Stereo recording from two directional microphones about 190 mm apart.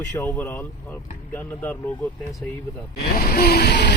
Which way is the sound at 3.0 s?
50° left (ahead or behind).